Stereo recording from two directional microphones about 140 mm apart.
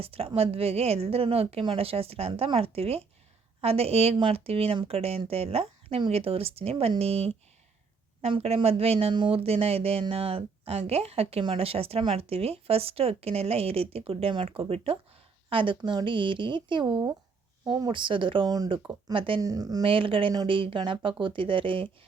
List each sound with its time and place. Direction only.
0.0 s speech: 45° right (ahead or behind)
19.4 s speech: 25° right (ahead or behind)
19.8 s speech: 40° right (ahead or behind)